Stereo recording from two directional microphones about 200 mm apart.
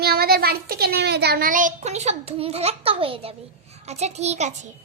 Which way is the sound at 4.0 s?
35° right (ahead or behind).